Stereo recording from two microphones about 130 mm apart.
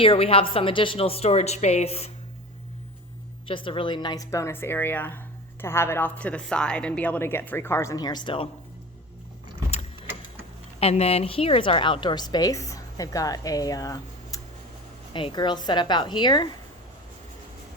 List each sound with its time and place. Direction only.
0.0 s a woman's voice: 45° left (ahead or behind)
3.4 s a woman's voice: 40° left (ahead or behind)
10.8 s a woman's voice: 55° left (ahead or behind); by 14.4 s 25° left (ahead or behind)
15.1 s a woman's voice: 35° left (ahead or behind)